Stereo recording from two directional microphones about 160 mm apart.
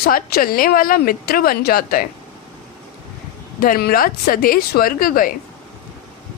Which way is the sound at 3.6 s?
65° left (ahead or behind).